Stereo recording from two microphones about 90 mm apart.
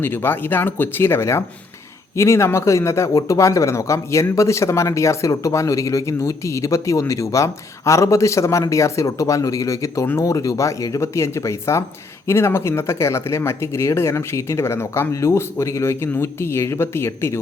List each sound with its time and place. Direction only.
0.0 s speech: 25° left (ahead or behind)